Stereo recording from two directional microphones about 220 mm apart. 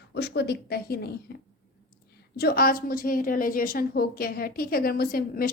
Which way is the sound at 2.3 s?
45° left (ahead or behind).